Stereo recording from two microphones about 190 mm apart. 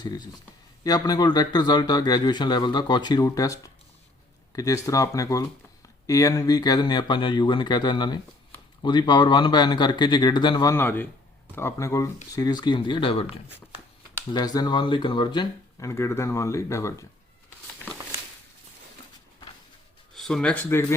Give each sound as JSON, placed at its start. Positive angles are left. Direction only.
{"t": 0.0, "sound": "speech", "side_deg": 20}
{"t": 14.3, "sound": "speech", "side_deg": 20}
{"t": 20.1, "sound": "speech", "side_deg": 5}